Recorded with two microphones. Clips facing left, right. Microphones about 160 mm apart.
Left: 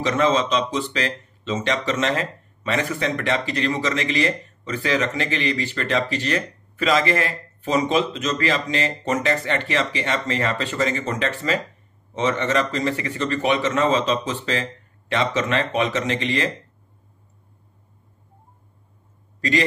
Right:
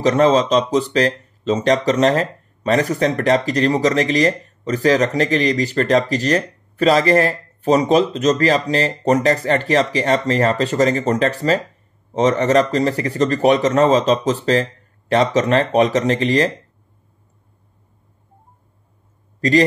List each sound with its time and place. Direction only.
0.0 s speech: 35° right (ahead or behind)
19.4 s speech: 35° right (ahead or behind)